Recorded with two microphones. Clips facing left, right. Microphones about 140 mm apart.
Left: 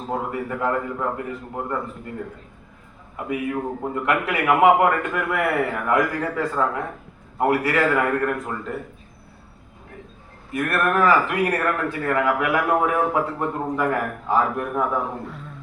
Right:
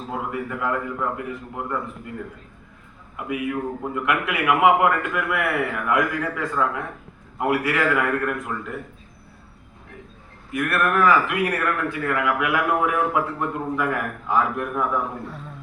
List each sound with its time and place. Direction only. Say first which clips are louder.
0.1 s speech: left 2 dB; 35° left (ahead or behind)
3.2 s speech: left 1 dB; 35° left (ahead or behind)
10.5 s speech: left 1 dB; 35° left (ahead or behind)